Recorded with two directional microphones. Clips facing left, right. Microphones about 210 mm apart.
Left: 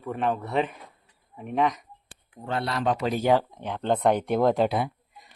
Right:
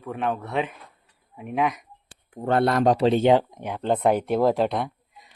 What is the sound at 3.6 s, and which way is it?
Speech, 10° right (ahead or behind).